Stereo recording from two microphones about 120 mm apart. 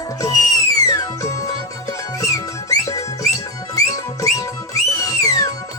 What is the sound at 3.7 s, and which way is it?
Music, 30° left (ahead or behind).